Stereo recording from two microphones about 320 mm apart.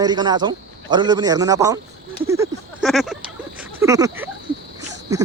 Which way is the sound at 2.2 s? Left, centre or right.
Centre.